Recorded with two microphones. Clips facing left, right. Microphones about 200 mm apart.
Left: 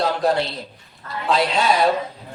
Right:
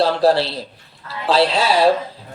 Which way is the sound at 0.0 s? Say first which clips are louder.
Right 4 dB; 30° right (ahead or behind).